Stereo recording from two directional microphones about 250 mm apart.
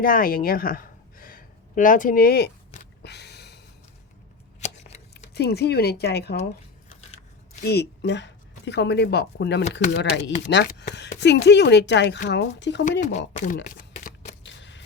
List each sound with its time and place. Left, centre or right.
0.0 s a woman's voice: left
3.0 s gasp: left
4.6 s shuffling cards: left
5.1 s speech: left
7.6 s speech: left
10.7 s a sound: left
11.2 s speech: left
13.1 s speech: left
13.6 s a sound: left
14.4 s a sound: left